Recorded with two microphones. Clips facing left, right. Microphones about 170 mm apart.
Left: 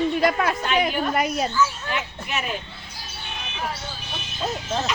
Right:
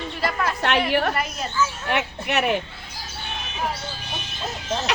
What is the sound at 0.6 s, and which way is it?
Speech, 70° right (ahead or behind).